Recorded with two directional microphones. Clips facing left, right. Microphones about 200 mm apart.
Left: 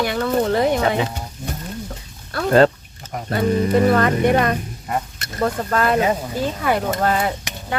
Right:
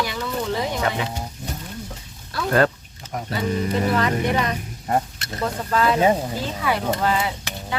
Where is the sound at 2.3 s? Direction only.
55° left (ahead or behind).